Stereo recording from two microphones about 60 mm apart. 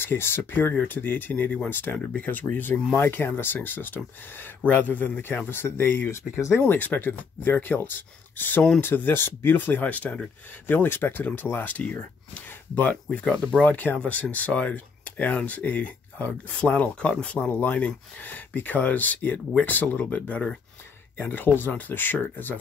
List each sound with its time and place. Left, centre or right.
0.0 s speech: left
5.5 s speech: left
6.6 s speech: left
13.1 s speech: centre